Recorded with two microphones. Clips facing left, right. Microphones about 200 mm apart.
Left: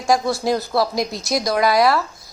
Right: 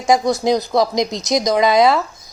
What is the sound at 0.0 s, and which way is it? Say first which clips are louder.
A woman's voice: right 3 dB; 20° right (ahead or behind).